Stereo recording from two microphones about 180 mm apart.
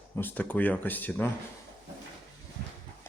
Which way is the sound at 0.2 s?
10° left (ahead or behind).